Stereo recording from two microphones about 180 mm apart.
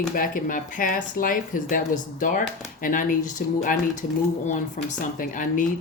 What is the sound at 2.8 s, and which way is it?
Speech, 50° left (ahead or behind).